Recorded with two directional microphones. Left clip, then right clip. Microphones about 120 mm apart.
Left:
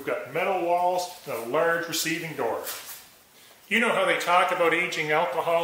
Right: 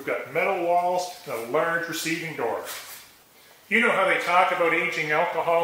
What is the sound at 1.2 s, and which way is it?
A man's voice, 30° left (ahead or behind).